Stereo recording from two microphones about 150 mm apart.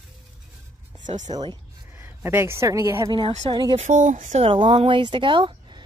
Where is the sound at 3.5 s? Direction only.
30° right (ahead or behind).